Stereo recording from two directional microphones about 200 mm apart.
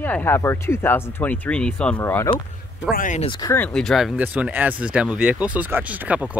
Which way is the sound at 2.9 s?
40° left (ahead or behind).